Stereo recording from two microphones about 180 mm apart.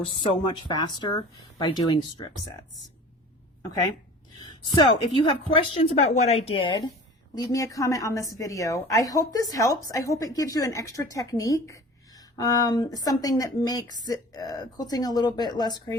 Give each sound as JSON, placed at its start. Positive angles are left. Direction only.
{"t": 0.0, "sound": "a woman's voice", "side_deg": 30}
{"t": 5.2, "sound": "a woman's voice", "side_deg": 30}